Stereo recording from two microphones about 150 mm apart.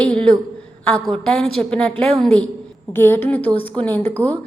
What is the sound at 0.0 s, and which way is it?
A woman's voice, 5° left (ahead or behind).